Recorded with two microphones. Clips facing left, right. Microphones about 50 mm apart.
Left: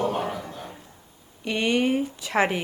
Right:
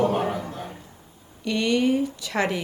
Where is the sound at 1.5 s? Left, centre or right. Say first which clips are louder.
Right 1 dB; left.